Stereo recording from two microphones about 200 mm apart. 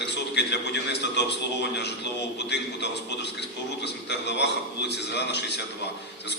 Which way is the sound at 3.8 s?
60° left (ahead or behind).